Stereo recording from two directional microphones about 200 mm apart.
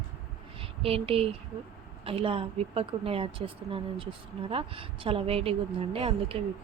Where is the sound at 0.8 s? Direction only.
30° right (ahead or behind).